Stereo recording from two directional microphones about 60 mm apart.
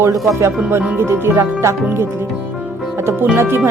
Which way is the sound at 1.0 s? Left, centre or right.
Right.